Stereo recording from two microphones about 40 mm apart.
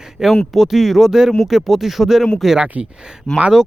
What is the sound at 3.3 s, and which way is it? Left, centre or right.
Speech, centre.